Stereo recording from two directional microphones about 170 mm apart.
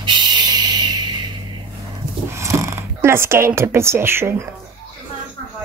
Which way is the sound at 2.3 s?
15° right (ahead or behind).